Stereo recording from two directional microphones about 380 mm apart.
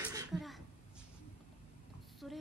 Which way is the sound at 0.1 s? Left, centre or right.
Centre.